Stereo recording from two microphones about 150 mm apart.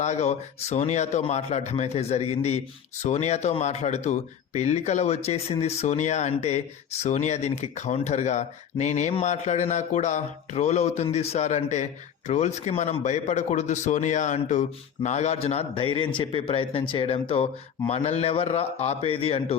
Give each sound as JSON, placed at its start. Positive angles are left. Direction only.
{"t": 0.0, "sound": "a man's voice", "side_deg": 50}